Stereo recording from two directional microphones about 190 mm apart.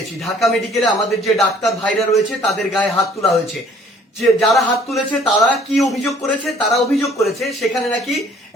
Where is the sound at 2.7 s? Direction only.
Centre (ahead or behind).